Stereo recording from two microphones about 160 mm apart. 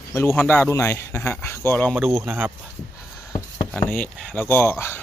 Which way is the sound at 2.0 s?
15° right (ahead or behind).